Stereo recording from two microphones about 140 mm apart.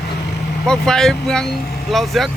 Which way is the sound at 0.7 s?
5° left (ahead or behind).